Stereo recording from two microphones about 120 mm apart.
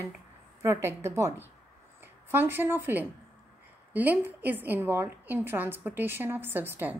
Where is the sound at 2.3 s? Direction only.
20° right (ahead or behind).